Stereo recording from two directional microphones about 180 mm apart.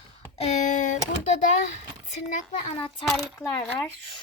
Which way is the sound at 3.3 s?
20° left (ahead or behind).